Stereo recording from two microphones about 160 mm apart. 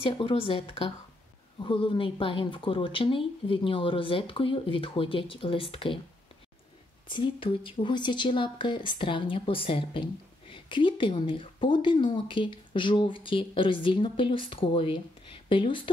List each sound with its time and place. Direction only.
0.0 s speech: 35° left (ahead or behind)
7.1 s speech: 30° left (ahead or behind)